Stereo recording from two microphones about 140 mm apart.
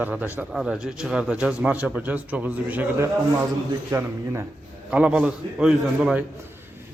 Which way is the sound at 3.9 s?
20° right (ahead or behind).